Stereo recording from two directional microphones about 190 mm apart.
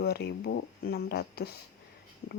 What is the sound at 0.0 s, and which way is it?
Speech, 60° left (ahead or behind).